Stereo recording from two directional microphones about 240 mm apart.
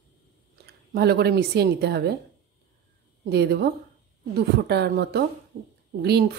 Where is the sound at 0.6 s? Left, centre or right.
Right.